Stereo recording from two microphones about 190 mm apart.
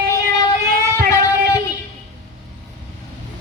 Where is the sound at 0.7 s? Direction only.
45° right (ahead or behind).